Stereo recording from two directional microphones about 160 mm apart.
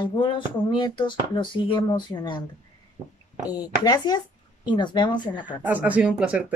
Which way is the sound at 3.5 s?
25° left (ahead or behind).